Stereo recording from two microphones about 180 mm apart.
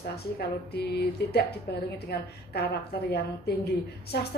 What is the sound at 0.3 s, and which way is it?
A woman's voice, 65° left (ahead or behind).